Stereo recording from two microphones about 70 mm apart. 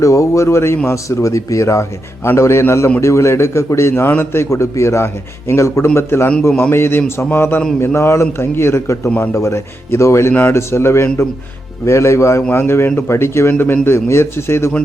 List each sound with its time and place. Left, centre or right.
0.0 s speech: left
1.2 s speech: left
4.4 s a man's voice: left
9.0 s a man's voice: left
9.3 s speech: left